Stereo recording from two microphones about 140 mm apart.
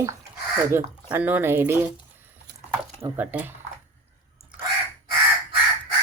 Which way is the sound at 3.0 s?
15° right (ahead or behind).